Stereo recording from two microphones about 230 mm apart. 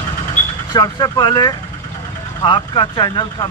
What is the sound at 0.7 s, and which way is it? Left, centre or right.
Speech, centre.